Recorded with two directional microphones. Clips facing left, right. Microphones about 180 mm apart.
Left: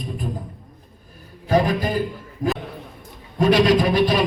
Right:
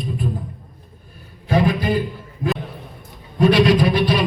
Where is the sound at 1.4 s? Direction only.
40° left (ahead or behind).